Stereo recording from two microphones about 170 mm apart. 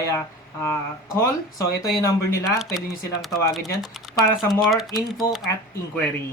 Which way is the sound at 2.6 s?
Centre (ahead or behind).